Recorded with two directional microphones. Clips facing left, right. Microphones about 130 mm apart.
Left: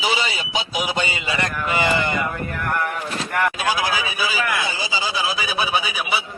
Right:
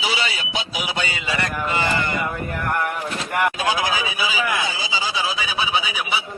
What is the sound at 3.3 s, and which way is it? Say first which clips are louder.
Speech: right 1 dB; 15° right (ahead or behind).